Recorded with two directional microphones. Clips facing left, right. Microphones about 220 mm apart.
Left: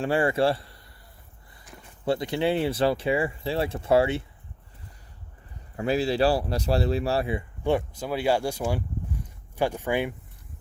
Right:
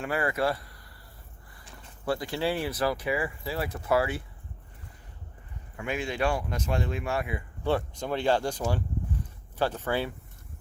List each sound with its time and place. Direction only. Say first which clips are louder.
0.0 s speech: left 5 dB; 30° left (ahead or behind)
2.0 s speech: left 4 dB; 20° left (ahead or behind)
5.7 s speech: left 8 dB; 35° left (ahead or behind)
7.6 s speech: left 2 dB; 15° left (ahead or behind)